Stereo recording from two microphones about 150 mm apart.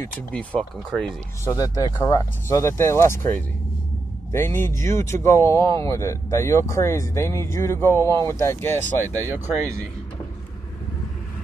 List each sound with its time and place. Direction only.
0.3 s speech: 10° left (ahead or behind)
1.4 s speech: 25° left (ahead or behind)
9.1 s speech: 20° right (ahead or behind)